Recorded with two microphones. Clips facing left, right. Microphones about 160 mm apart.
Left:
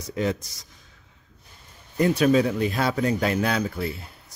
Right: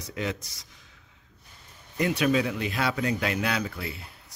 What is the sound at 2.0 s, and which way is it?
Speech, 40° left (ahead or behind).